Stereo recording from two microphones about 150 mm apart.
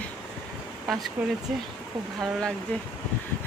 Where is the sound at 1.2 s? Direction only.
10° right (ahead or behind).